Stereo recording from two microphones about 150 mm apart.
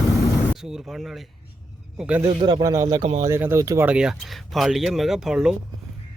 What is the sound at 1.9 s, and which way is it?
Speech, 10° right (ahead or behind).